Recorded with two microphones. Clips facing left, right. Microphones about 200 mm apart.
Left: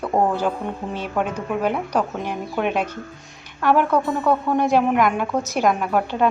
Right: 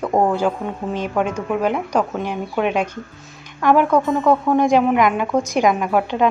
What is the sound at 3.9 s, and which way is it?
Speech, 5° left (ahead or behind).